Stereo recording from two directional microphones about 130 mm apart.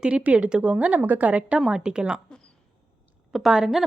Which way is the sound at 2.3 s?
5° left (ahead or behind).